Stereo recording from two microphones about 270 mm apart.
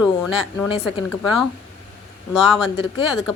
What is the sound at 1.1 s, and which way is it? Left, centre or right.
Speech, centre.